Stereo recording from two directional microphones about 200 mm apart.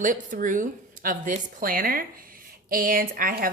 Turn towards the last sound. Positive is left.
turn(degrees=-45)  # may be behind; listen again after turning